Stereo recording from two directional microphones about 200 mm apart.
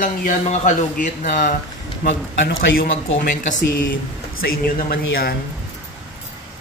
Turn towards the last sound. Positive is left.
turn(degrees=50)  # may be behind; listen again after turning